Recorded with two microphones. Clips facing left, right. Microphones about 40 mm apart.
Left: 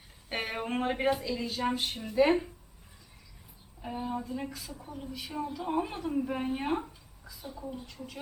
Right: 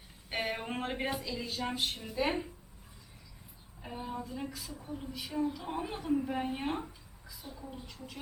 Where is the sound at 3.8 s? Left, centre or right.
Centre.